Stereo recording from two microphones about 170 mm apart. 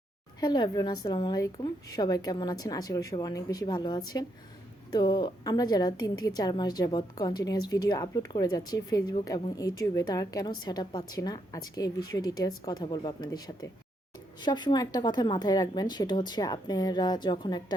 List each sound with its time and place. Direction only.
0.3 s a woman's voice: 25° left (ahead or behind)